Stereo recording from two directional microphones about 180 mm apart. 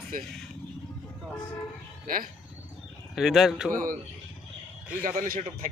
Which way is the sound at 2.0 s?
50° right (ahead or behind).